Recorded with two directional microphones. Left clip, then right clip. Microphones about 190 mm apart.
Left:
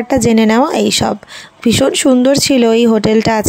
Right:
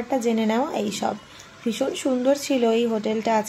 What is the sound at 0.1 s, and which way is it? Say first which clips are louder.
Speech: left 11 dB; 55° left (ahead or behind).